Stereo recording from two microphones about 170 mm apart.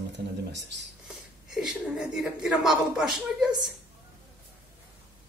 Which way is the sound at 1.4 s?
5° right (ahead or behind).